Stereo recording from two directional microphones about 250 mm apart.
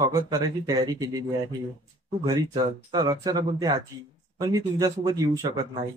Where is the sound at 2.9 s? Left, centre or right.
Centre.